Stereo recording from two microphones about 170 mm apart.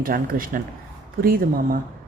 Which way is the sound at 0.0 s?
55° right (ahead or behind).